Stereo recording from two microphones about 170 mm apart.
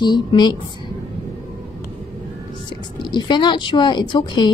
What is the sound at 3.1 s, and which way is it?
A woman's voice, 25° left (ahead or behind).